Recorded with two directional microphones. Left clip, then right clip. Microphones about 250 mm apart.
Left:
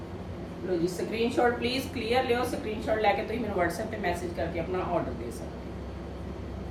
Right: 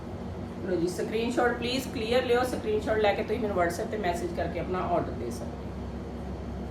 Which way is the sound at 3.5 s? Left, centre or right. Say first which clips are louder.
Left 1 dB; centre.